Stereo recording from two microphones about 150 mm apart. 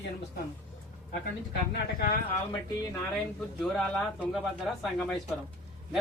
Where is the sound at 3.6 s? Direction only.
Centre (ahead or behind).